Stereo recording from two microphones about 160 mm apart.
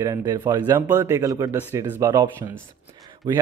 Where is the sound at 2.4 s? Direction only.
30° right (ahead or behind).